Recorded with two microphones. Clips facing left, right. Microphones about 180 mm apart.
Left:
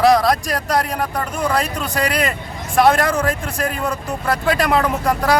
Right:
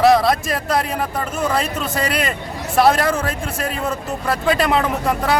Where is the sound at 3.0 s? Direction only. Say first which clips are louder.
Left 1 dB; 25° right (ahead or behind).